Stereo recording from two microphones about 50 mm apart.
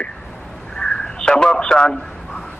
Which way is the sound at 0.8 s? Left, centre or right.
Centre.